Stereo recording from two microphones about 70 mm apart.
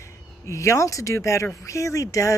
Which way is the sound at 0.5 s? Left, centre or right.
Left.